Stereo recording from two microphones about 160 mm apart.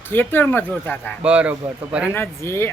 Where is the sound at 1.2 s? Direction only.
5° right (ahead or behind).